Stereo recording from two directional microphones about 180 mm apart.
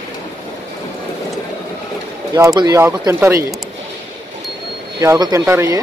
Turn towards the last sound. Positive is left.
turn(degrees=-15)  # may be behind; listen again after turning